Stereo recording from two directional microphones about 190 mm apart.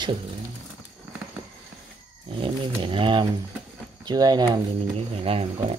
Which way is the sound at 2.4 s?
30° right (ahead or behind).